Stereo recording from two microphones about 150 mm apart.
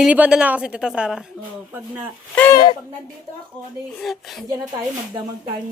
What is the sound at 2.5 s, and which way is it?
Speech, 30° left (ahead or behind).